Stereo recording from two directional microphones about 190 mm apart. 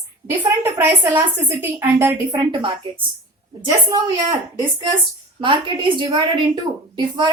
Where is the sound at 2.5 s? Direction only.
30° right (ahead or behind).